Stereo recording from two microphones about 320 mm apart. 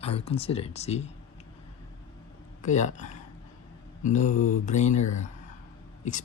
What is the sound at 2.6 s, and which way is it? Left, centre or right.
Speech, left.